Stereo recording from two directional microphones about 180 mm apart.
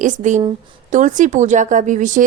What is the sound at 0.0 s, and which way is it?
A woman's voice, 40° right (ahead or behind).